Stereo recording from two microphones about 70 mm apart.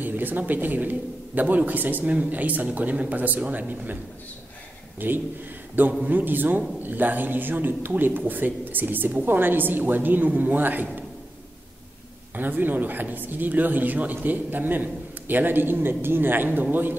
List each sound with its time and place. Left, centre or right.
0.0 s speech: right
5.0 s speech: right
12.4 s speech: right